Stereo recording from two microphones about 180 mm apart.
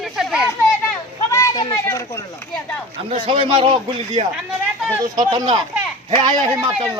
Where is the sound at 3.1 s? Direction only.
30° right (ahead or behind).